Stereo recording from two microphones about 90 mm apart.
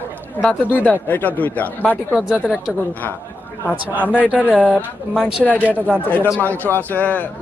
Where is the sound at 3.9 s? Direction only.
20° right (ahead or behind).